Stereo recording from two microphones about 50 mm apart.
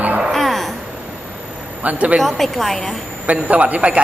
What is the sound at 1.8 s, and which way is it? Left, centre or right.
Speech, right.